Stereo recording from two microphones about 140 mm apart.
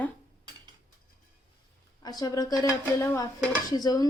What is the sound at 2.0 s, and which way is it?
Speech, 25° left (ahead or behind).